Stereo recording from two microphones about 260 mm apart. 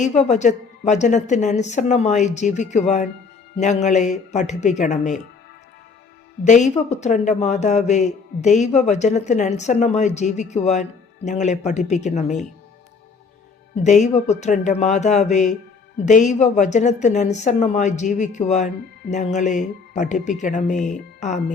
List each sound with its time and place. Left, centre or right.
0.0 s a woman's voice: left
6.4 s a woman's voice: left
13.7 s a woman's voice: left